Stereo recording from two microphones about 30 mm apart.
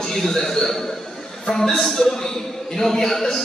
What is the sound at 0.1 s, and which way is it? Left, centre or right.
A man's voice, centre.